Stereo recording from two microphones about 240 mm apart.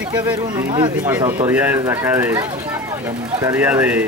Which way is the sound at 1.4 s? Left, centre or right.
Centre.